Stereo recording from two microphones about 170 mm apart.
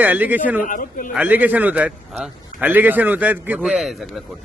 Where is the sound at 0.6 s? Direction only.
55° left (ahead or behind).